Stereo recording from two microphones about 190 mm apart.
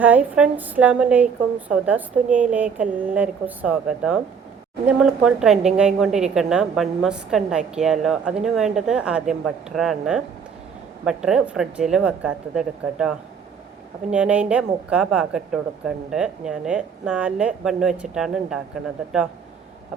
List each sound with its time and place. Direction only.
0.0 s a woman's voice: 10° right (ahead or behind)